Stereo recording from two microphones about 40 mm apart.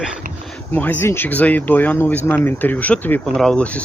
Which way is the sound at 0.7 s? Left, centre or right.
Left.